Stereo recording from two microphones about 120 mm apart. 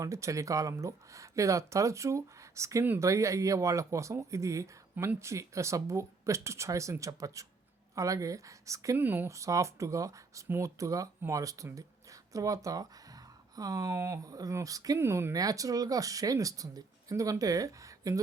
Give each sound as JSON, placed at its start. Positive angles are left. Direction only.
{"t": 0.0, "sound": "speech", "side_deg": -25}